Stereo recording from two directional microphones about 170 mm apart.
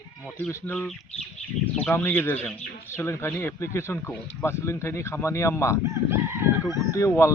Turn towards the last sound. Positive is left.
turn(degrees=15)  # may be behind; listen again after turning